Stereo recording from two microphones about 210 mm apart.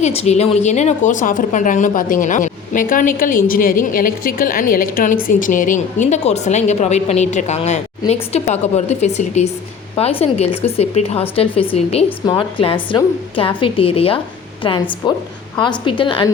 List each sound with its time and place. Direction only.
0.0 s a woman's voice: 30° left (ahead or behind)